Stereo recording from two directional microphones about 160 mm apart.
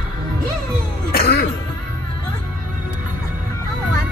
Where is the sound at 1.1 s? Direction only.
70° left (ahead or behind).